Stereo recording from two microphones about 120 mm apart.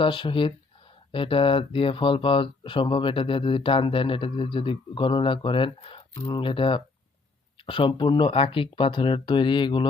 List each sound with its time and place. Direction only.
0.0 s speech: 45° left (ahead or behind)